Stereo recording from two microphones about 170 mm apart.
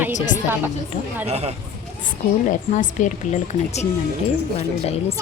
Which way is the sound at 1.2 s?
40° right (ahead or behind).